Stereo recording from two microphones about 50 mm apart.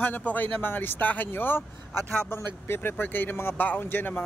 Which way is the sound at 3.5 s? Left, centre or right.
Left.